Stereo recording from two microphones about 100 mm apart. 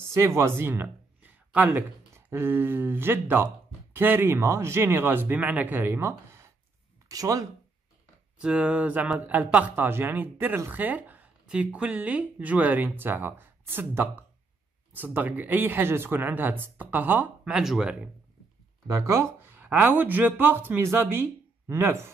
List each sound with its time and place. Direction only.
0.1 s a sound: 30° right (ahead or behind)
1.8 s speech: 20° right (ahead or behind)
8.4 s speech: 10° right (ahead or behind)
17.6 s speech: 5° right (ahead or behind)
18.9 s speech: 30° right (ahead or behind)